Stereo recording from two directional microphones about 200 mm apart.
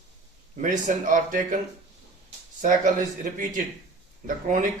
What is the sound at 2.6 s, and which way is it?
Speech, 40° right (ahead or behind).